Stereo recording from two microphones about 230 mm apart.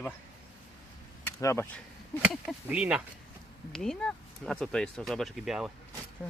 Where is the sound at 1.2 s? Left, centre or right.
Centre.